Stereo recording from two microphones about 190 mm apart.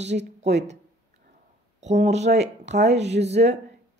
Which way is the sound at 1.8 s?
35° right (ahead or behind).